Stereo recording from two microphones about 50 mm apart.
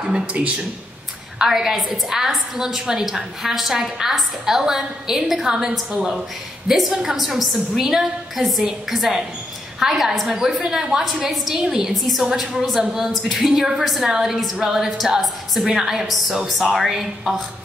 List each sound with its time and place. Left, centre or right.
0.0 s speech: right
1.4 s a woman's voice: centre
11.9 s a woman's voice: centre